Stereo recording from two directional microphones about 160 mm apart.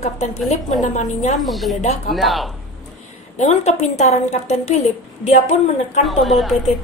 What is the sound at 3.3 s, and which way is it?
A woman's voice, 45° left (ahead or behind).